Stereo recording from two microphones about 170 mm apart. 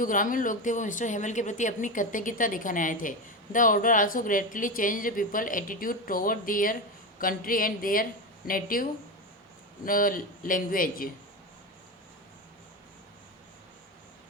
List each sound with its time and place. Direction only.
0.0 s a woman's voice: 50° left (ahead or behind)